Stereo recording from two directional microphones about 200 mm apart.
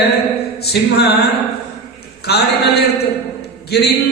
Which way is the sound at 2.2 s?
55° left (ahead or behind).